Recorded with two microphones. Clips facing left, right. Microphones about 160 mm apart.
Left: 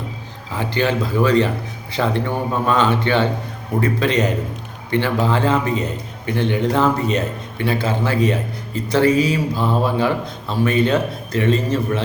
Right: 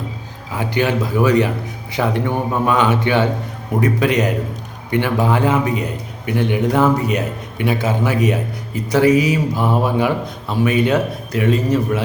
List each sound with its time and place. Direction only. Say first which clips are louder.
0.5 s a man's voice: right 1 dB; 10° right (ahead or behind)